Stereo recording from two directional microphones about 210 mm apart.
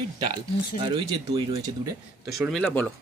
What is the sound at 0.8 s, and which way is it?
Speech, 25° right (ahead or behind).